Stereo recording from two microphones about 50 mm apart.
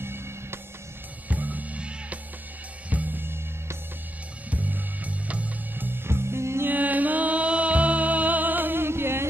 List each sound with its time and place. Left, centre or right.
0.0 s music: right
1.3 s music: right
3.2 s music: right
4.5 s music: right
5.9 s music: right
6.7 s music: right